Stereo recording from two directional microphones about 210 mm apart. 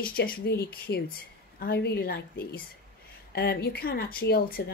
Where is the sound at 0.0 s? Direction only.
45° left (ahead or behind).